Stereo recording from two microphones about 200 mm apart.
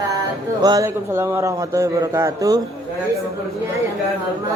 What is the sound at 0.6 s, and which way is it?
A man's voice, 15° right (ahead or behind).